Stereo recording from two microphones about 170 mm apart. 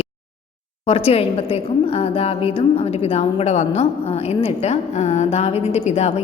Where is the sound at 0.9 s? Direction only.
35° left (ahead or behind).